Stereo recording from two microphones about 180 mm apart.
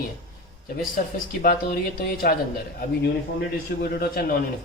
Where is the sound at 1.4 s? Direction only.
55° left (ahead or behind).